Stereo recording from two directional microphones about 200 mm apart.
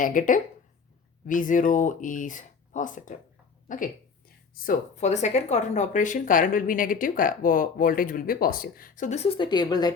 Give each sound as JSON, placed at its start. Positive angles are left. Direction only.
{"t": 0.0, "sound": "speech", "side_deg": 40}
{"t": 4.6, "sound": "speech", "side_deg": 40}